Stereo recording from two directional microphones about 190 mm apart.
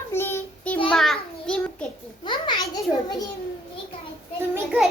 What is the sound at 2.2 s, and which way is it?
Speech, 25° left (ahead or behind).